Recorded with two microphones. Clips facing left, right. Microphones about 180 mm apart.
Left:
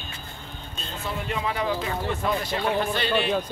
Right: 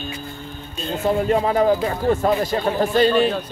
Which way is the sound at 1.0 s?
40° right (ahead or behind).